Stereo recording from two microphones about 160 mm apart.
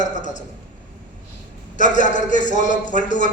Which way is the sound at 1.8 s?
50° left (ahead or behind).